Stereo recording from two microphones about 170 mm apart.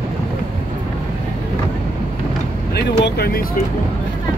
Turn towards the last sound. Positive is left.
turn(degrees=65)  # may be behind; listen again after turning